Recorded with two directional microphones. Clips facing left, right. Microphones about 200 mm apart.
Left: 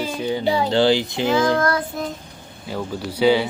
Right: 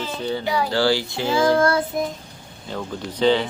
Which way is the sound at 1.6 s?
30° right (ahead or behind).